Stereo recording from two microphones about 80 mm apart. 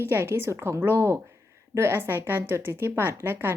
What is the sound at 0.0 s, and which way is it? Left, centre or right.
Speech, right.